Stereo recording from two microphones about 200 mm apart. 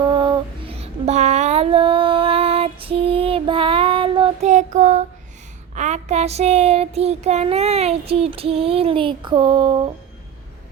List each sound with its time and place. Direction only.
0.0 s child singing: 20° right (ahead or behind)
4.4 s child singing: 35° right (ahead or behind); by 9.7 s 20° right (ahead or behind)